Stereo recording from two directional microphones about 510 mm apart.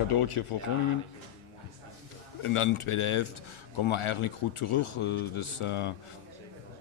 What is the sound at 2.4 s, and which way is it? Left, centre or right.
Speech, left.